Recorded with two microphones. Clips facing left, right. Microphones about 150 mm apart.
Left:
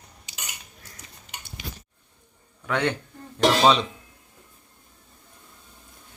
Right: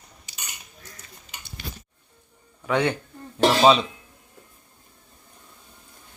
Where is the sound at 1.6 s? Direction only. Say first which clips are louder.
Right 1 dB; 15° left (ahead or behind).